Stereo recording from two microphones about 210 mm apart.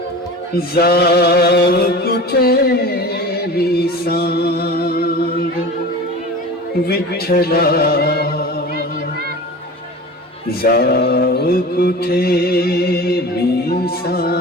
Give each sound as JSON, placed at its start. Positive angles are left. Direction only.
{"t": 0.5, "sound": "mantra", "side_deg": 50}
{"t": 3.6, "sound": "music", "side_deg": 50}
{"t": 6.8, "sound": "speech", "side_deg": 45}
{"t": 10.6, "sound": "mantra", "side_deg": 45}